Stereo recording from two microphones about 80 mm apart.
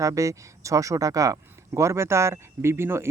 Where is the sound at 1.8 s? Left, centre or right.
Right.